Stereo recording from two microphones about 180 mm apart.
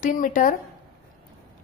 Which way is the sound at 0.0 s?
50° left (ahead or behind).